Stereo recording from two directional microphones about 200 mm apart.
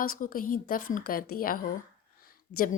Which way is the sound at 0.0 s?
45° left (ahead or behind).